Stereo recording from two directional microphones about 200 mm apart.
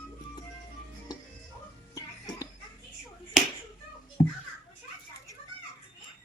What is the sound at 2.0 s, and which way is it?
Music, 15° left (ahead or behind).